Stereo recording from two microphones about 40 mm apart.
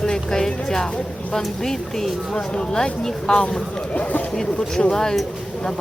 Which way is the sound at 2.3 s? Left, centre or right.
Left.